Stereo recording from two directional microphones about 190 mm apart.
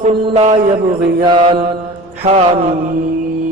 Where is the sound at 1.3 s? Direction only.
25° right (ahead or behind).